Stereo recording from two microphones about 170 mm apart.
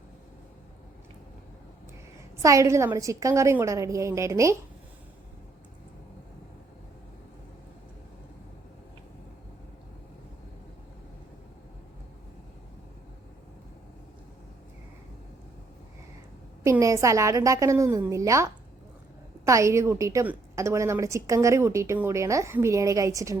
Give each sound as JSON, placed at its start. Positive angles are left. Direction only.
{"t": 2.4, "sound": "a woman's voice", "side_deg": -20}
{"t": 16.6, "sound": "a woman's voice", "side_deg": -15}